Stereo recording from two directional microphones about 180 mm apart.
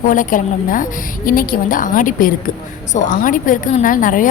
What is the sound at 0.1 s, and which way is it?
A woman's voice, 45° left (ahead or behind).